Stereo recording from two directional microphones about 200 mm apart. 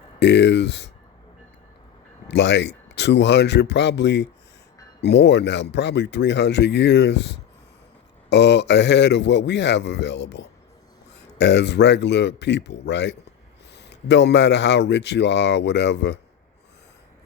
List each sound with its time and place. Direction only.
0.2 s speech: 60° left (ahead or behind)
2.2 s speech: 60° left (ahead or behind)